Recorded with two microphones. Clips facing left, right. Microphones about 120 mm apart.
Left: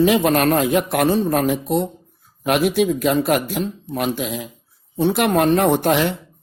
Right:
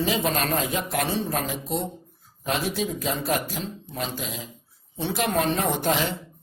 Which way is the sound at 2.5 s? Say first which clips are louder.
Left 10 dB; 70° left (ahead or behind).